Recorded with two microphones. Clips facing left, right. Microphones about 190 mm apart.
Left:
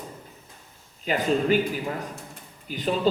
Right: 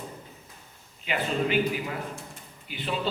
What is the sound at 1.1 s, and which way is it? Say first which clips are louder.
Speech: left 5 dB; 40° left (ahead or behind).